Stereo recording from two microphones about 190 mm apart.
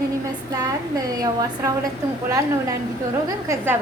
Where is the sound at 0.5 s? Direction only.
20° right (ahead or behind).